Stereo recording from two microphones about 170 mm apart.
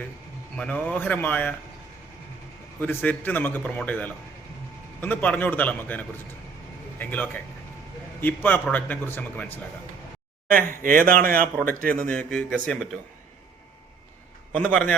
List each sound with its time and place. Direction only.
0.5 s a man's voice: 5° left (ahead or behind)
2.8 s a man's voice: 10° left (ahead or behind)
10.8 s speech: 55° right (ahead or behind)
11.9 s speech: 5° left (ahead or behind)
14.5 s a man's voice: 5° left (ahead or behind)